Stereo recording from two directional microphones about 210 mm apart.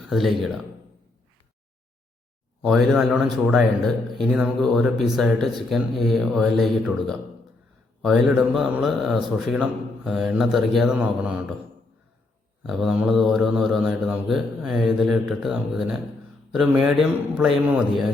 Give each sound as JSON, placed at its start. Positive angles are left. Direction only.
{"t": 0.0, "sound": "speech", "side_deg": 0}
{"t": 2.6, "sound": "speech", "side_deg": 0}
{"t": 12.6, "sound": "a man's voice", "side_deg": 0}